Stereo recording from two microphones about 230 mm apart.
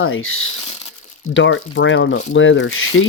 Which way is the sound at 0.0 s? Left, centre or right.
Left.